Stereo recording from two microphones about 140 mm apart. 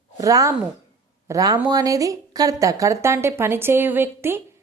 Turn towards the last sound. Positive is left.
turn(degrees=-15)  # may be behind; listen again after turning